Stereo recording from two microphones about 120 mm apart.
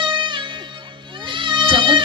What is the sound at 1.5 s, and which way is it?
Cat, 45° right (ahead or behind).